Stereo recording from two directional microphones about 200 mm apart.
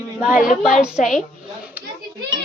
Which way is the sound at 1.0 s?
40° left (ahead or behind).